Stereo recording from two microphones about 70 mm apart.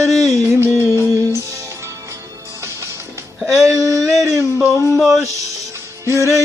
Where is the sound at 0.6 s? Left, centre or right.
Right.